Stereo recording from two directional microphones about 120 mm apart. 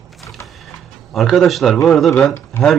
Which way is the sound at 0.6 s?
Centre (ahead or behind).